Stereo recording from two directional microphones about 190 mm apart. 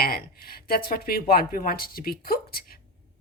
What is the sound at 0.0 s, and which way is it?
Speech, 50° left (ahead or behind).